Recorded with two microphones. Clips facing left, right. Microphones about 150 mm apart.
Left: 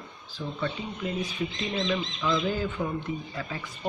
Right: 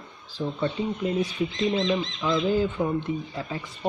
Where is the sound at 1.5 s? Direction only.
25° right (ahead or behind).